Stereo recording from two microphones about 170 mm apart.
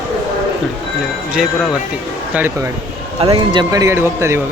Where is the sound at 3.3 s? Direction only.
30° right (ahead or behind).